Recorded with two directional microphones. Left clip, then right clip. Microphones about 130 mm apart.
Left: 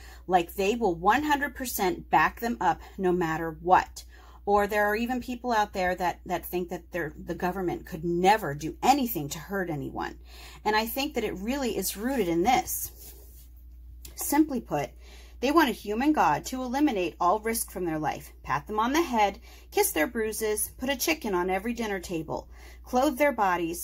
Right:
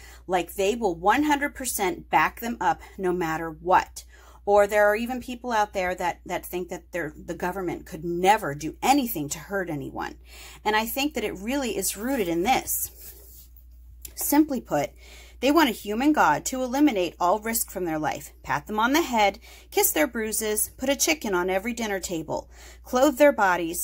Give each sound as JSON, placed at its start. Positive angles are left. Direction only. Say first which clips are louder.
{"t": 0.3, "sound": "speech", "louder": "even", "side_deg": -20}
{"t": 14.5, "sound": "speech", "louder": "right 4 dB", "side_deg": -55}